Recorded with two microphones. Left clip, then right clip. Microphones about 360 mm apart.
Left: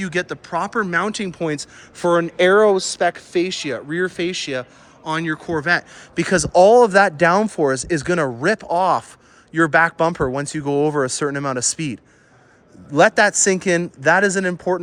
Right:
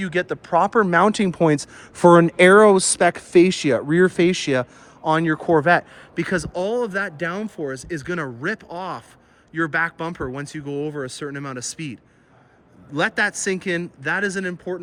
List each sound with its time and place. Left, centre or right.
0.0 s speech: centre
6.1 s speech: centre